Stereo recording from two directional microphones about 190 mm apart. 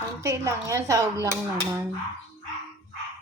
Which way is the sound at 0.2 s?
15° right (ahead or behind).